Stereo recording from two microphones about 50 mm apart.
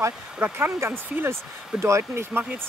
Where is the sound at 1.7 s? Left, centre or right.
Centre.